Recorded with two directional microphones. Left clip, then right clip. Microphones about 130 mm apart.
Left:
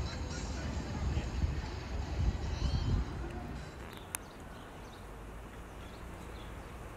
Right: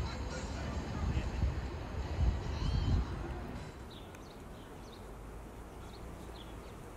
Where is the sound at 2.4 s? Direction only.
40° right (ahead or behind).